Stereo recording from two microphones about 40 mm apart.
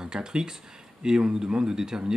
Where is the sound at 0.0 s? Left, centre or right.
Centre.